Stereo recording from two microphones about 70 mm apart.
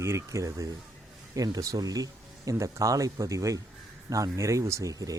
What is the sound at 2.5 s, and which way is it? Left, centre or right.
Speech, right.